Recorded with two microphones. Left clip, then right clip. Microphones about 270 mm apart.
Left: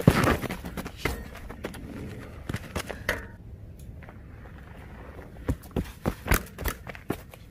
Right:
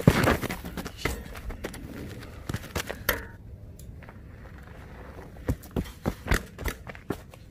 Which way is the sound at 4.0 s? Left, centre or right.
Right.